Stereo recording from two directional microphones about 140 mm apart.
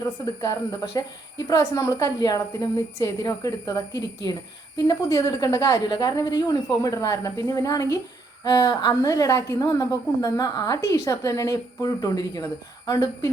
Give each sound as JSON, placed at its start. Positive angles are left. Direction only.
{"t": 0.0, "sound": "a woman's voice", "side_deg": 25}